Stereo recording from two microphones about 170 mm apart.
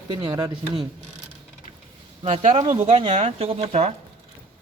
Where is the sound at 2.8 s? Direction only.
40° right (ahead or behind).